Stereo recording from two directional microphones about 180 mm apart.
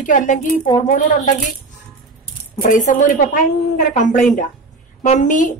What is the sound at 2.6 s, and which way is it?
A woman's voice, 45° left (ahead or behind).